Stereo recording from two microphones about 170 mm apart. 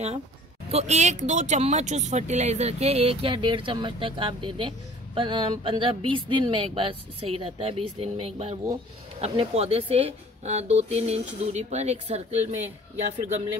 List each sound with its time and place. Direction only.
0.7 s speech: 40° right (ahead or behind)